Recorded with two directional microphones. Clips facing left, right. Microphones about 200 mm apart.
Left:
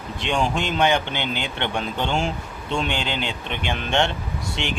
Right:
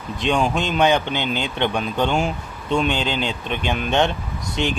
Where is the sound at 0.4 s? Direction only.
20° right (ahead or behind).